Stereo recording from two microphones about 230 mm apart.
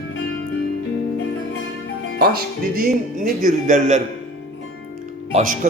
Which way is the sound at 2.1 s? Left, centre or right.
Right.